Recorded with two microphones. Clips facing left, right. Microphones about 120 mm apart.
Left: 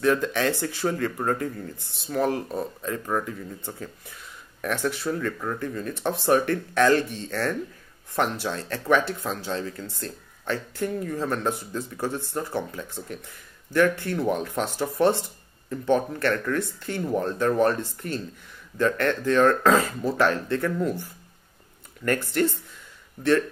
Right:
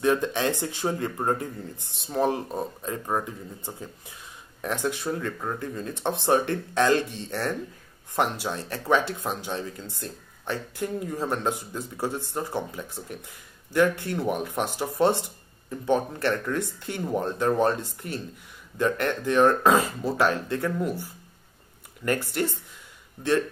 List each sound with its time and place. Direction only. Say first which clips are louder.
0.0 s speech: left 1 dB; 20° right (ahead or behind)